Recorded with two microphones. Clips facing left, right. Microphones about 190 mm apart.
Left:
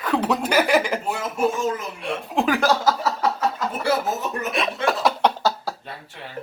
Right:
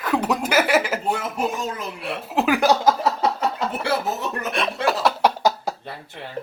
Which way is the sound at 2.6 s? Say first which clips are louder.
Right 2 dB; 20° right (ahead or behind).